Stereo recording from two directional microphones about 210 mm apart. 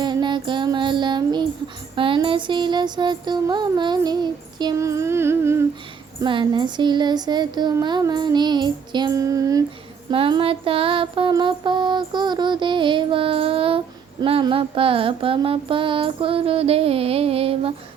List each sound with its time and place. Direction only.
0.0 s child singing: 20° right (ahead or behind)
2.0 s music: 25° right (ahead or behind)